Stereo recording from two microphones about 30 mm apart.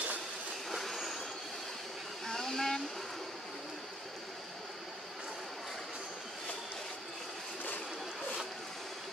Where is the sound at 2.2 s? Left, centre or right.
Centre.